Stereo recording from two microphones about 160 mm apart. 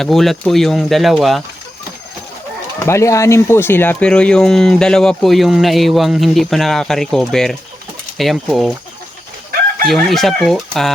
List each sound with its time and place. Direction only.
0.0 s speech: centre (ahead or behind)
2.7 s speech: 15° left (ahead or behind); by 8.7 s centre (ahead or behind)
9.8 s speech: centre (ahead or behind)